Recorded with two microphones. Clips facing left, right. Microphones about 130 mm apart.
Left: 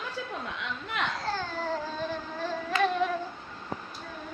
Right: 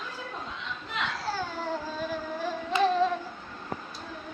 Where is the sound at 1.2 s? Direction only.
10° right (ahead or behind).